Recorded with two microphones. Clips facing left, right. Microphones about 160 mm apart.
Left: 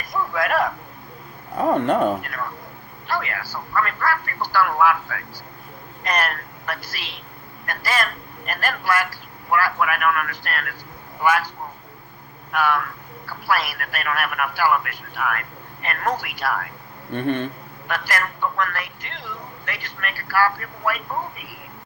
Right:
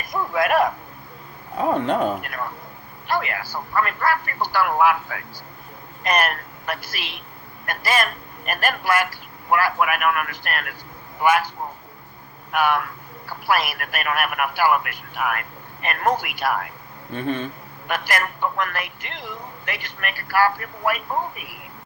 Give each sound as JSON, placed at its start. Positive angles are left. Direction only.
{"t": 0.1, "sound": "a sound", "side_deg": -20}
{"t": 1.5, "sound": "speech", "side_deg": 55}
{"t": 3.1, "sound": "a man's voice", "side_deg": -20}
{"t": 12.5, "sound": "speech", "side_deg": -20}
{"t": 17.1, "sound": "speech", "side_deg": 60}
{"t": 17.8, "sound": "a man's voice", "side_deg": -20}